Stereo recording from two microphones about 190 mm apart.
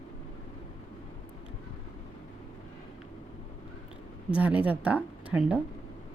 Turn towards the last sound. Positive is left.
turn(degrees=-10)  # may be behind; listen again after turning